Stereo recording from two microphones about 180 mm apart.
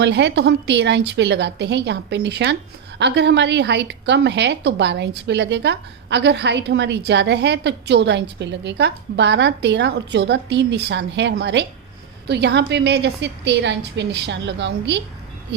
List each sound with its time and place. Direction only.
0.0 s a woman's voice: 70° right (ahead or behind)